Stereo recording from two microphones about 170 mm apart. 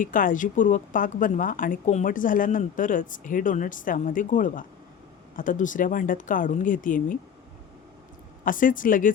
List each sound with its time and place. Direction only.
0.0 s speech: 50° left (ahead or behind)
8.4 s speech: 50° left (ahead or behind)